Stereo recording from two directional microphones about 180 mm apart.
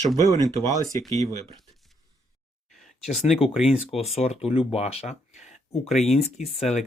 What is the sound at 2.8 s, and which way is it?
Speech, centre (ahead or behind).